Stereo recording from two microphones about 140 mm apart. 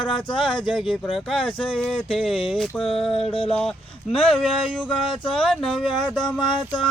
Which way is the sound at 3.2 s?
45° left (ahead or behind).